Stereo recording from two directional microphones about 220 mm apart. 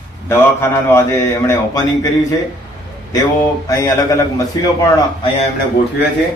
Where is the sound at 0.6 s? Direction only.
10° left (ahead or behind).